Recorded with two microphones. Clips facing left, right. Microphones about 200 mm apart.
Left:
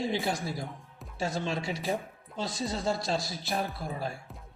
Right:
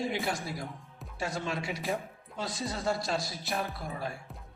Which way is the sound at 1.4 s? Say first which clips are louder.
Left 2 dB; 30° left (ahead or behind).